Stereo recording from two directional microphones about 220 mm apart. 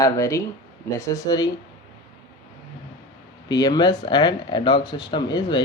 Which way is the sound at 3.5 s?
15° left (ahead or behind).